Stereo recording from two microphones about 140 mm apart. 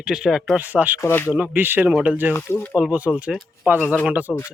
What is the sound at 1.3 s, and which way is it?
Speech, 10° right (ahead or behind).